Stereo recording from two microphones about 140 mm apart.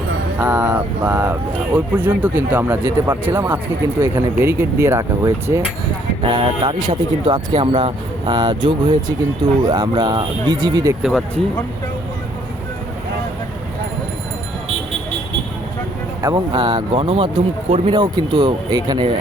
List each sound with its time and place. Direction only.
0.3 s speech: 15° right (ahead or behind)
6.2 s speech: 35° right (ahead or behind)
16.2 s speech: 30° right (ahead or behind)